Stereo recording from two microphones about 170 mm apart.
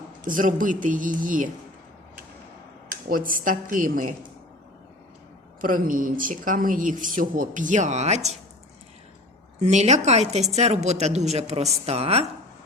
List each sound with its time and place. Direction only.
0.3 s speech: 50° right (ahead or behind)
3.1 s speech: 55° right (ahead or behind)
5.5 s speech: 55° right (ahead or behind)
9.6 s speech: 45° right (ahead or behind)